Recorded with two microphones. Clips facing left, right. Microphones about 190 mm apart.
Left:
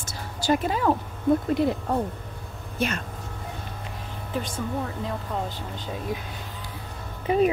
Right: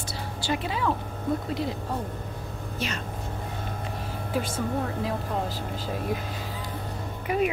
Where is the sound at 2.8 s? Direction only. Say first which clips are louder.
Left 6 dB; 55° left (ahead or behind).